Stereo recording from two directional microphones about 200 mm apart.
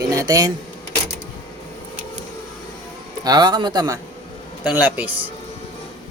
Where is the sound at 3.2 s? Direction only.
20° right (ahead or behind).